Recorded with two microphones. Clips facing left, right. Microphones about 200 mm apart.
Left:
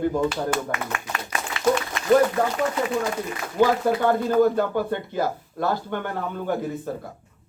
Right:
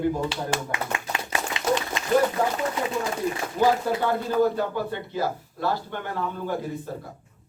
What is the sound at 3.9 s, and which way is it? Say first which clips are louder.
A man's voice: left 4 dB; 55° left (ahead or behind).